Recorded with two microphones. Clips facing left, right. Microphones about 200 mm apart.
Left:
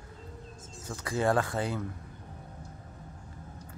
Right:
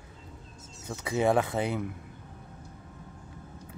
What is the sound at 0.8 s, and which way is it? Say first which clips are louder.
Speech: right 2 dB; 20° right (ahead or behind).